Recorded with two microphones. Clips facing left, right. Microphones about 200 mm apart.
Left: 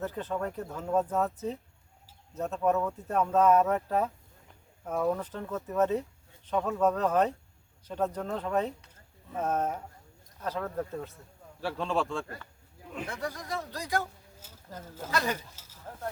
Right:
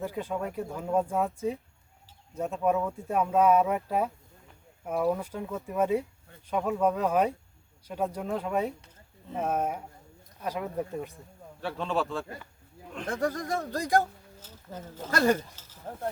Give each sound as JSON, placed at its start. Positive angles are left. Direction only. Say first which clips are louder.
{"t": 0.0, "sound": "speech", "louder": "right 1 dB", "side_deg": -10}
{"t": 11.6, "sound": "a man's voice", "louder": "even", "side_deg": 0}
{"t": 13.1, "sound": "speech", "louder": "right 8 dB", "side_deg": -50}
{"t": 15.1, "sound": "speech", "louder": "right 7 dB", "side_deg": -50}
{"t": 15.9, "sound": "sizzle", "louder": "right 5 dB", "side_deg": -30}